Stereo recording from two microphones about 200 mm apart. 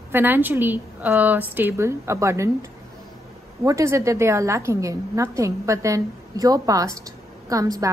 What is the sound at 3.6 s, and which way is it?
A woman's voice, 15° right (ahead or behind).